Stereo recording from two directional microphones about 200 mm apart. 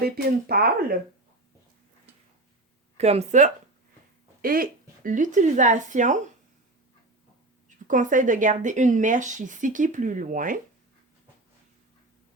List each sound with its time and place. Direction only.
0.0 s speech: 50° right (ahead or behind)
3.0 s a woman's voice: 30° right (ahead or behind)
4.4 s speech: 45° right (ahead or behind)
7.9 s a woman's voice: 40° right (ahead or behind)